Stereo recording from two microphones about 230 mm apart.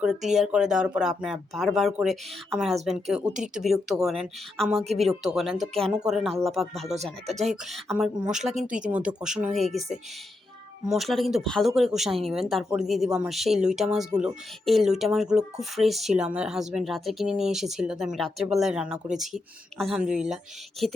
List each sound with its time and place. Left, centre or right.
0.0 s speech: centre